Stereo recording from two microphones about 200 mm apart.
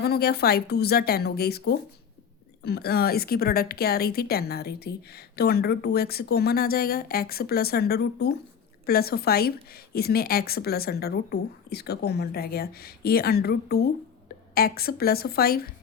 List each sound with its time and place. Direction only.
0.0 s a woman's voice: 50° left (ahead or behind)